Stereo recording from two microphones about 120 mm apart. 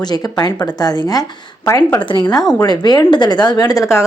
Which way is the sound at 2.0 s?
40° left (ahead or behind).